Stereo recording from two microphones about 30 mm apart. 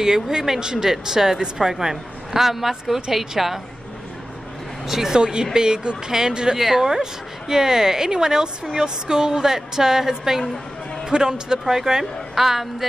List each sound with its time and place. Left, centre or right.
0.0 s a woman's voice: centre
4.8 s speech: centre
5.1 s a woman's voice: right; by 12.6 s centre